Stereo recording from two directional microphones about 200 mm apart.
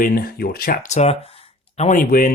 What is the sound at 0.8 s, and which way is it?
Speech, 35° left (ahead or behind).